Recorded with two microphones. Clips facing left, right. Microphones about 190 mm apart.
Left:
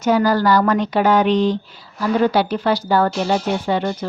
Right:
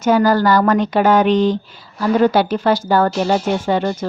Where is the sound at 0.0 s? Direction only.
50° right (ahead or behind).